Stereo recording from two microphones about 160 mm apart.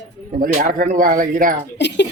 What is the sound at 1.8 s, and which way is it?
Speech, 90° left.